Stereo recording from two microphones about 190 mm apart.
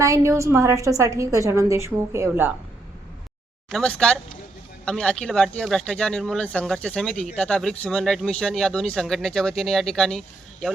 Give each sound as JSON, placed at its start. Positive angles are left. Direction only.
{"t": 0.0, "sound": "a woman's voice", "side_deg": -15}
{"t": 3.7, "sound": "speech", "side_deg": 5}